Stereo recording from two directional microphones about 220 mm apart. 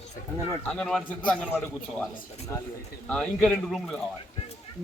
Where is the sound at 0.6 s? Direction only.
5° left (ahead or behind).